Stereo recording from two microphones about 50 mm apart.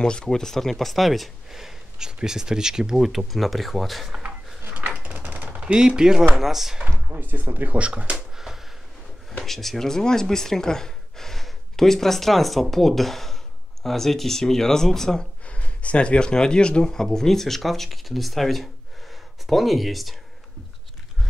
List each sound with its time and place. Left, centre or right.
0.0 s speech: centre
4.6 s a sound: right
5.5 s speech: centre
7.1 s speech: right
8.5 s a sound: centre
9.4 s speech: centre
15.4 s speech: left; by 20.2 s centre